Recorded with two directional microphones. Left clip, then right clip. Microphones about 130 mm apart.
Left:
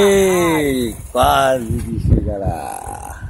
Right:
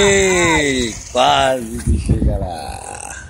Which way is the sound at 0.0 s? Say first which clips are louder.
Even; 30° left (ahead or behind).